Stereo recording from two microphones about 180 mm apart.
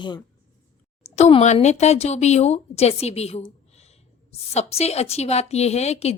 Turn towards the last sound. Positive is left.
turn(degrees=35)  # may be behind; listen again after turning